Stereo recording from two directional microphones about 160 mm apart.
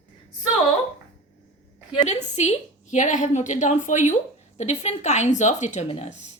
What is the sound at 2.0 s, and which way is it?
A woman's voice, 45° left (ahead or behind).